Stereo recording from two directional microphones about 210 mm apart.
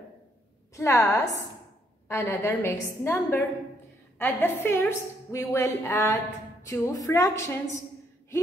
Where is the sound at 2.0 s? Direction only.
10° left (ahead or behind).